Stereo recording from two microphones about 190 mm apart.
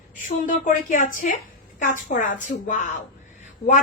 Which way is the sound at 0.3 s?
45° left (ahead or behind).